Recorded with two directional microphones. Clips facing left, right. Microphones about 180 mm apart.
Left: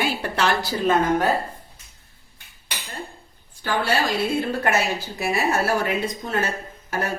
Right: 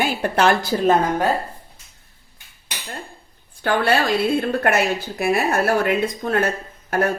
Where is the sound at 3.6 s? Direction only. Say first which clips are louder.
Right 4 dB; 60° right (ahead or behind).